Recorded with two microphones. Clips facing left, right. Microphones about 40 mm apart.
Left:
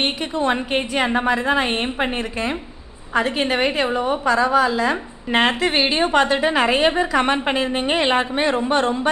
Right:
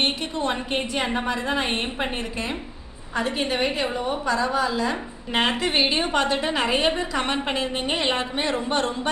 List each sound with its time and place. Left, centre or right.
0.0 s a woman's voice: left
3.2 s a woman's voice: left
5.6 s a woman's voice: centre